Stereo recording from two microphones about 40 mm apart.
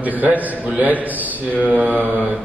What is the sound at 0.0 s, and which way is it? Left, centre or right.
A woman's voice, right.